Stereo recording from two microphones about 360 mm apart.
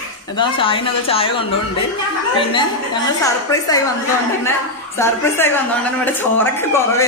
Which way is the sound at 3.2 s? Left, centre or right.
Centre.